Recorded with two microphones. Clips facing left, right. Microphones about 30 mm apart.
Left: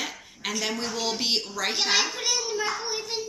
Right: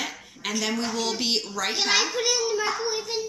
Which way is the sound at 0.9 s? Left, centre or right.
Centre.